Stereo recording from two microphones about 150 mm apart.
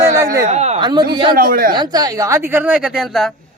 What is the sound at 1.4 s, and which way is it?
Speech, 70° right (ahead or behind).